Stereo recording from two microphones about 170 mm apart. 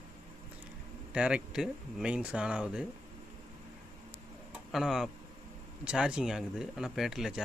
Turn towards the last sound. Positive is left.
turn(degrees=0)  # may be behind; listen again after turning